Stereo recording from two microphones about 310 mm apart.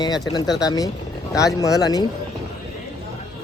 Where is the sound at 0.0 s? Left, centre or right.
Centre.